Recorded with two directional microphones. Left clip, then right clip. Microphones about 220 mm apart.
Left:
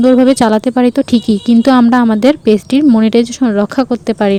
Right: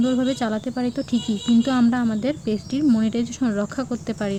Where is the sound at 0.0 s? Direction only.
40° left (ahead or behind).